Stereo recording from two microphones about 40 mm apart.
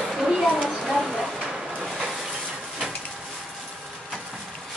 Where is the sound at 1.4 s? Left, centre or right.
Centre.